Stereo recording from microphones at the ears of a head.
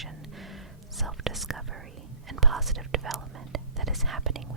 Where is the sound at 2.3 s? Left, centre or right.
Right.